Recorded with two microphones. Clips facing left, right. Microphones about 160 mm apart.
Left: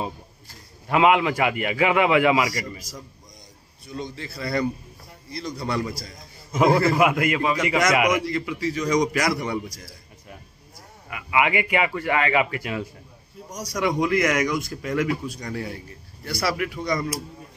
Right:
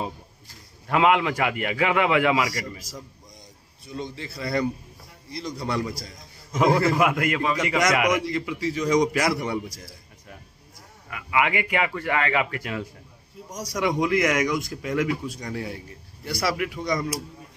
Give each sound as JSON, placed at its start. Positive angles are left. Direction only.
{"t": 0.8, "sound": "a man's voice", "side_deg": 10}
{"t": 3.9, "sound": "a man's voice", "side_deg": -20}
{"t": 6.5, "sound": "a man's voice", "side_deg": 5}
{"t": 8.3, "sound": "a man's voice", "side_deg": -20}
{"t": 11.1, "sound": "a man's voice", "side_deg": 15}
{"t": 13.7, "sound": "a man's voice", "side_deg": -20}